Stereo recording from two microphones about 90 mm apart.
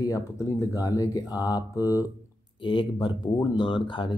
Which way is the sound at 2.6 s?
60° left (ahead or behind).